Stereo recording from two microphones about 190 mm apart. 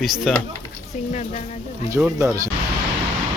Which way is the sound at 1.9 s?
10° right (ahead or behind).